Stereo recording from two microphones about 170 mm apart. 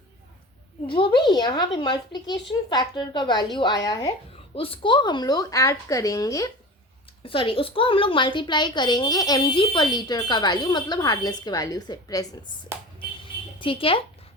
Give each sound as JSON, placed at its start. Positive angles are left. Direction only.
{"t": 0.9, "sound": "a woman's voice", "side_deg": 30}
{"t": 4.5, "sound": "a woman's voice", "side_deg": 30}
{"t": 7.3, "sound": "a woman's voice", "side_deg": 30}
{"t": 13.2, "sound": "a sound", "side_deg": 30}